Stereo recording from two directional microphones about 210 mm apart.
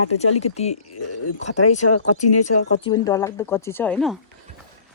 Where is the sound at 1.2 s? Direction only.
90° left.